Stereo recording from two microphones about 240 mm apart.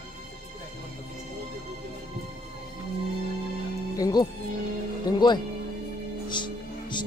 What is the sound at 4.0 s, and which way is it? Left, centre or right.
Speech, centre.